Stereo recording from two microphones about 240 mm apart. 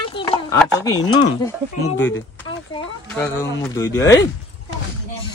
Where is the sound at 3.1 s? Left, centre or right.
Centre.